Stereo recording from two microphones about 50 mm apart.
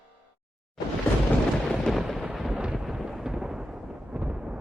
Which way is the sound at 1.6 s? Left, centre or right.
Centre.